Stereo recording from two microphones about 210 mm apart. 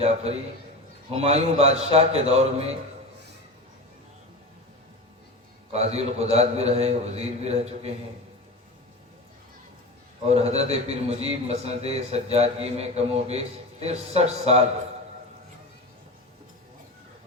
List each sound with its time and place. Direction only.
1.1 s a man's voice: 30° right (ahead or behind)
5.7 s a man's voice: 30° right (ahead or behind)
10.2 s a man's voice: 30° right (ahead or behind)